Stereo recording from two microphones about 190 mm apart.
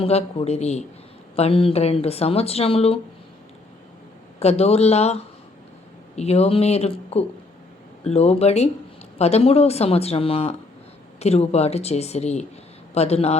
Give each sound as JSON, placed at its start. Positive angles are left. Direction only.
{"t": 0.0, "sound": "speech", "side_deg": 30}
{"t": 4.4, "sound": "speech", "side_deg": 35}